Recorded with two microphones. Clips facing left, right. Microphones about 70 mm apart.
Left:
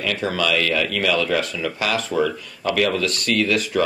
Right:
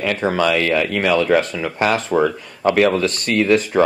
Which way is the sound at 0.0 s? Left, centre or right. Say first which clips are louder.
Right 5 dB; right.